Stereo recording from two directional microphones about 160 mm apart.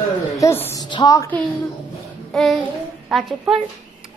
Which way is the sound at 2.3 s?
Centre (ahead or behind).